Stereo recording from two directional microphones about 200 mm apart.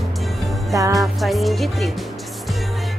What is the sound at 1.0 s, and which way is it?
Music, centre (ahead or behind).